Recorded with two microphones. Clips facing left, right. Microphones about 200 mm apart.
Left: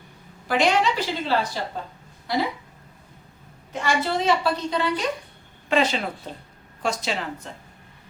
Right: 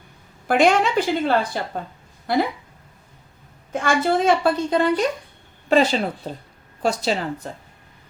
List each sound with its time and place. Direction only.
0.4 s a woman's voice: 50° right (ahead or behind)
3.7 s a woman's voice: 50° right (ahead or behind)